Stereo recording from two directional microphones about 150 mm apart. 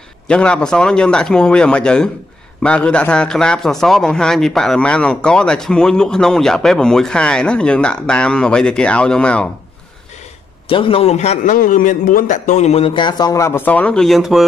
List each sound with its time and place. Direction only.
0.3 s a man's voice: 5° left (ahead or behind)
10.7 s a man's voice: 35° left (ahead or behind)
11.5 s speech: 65° left (ahead or behind); by 14.4 s centre (ahead or behind)